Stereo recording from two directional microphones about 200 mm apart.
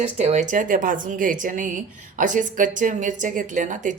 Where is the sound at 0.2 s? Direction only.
35° right (ahead or behind).